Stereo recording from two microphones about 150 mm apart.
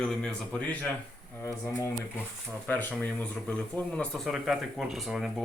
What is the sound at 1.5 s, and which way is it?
Speech, 20° left (ahead or behind).